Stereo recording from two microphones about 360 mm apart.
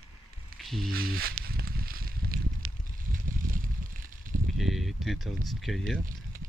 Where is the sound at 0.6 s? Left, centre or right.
Centre.